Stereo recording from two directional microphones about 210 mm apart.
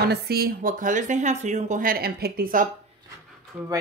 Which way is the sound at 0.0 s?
50° right (ahead or behind).